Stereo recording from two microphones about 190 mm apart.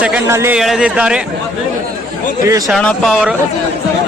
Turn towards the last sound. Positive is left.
turn(degrees=0)  # may be behind; listen again after turning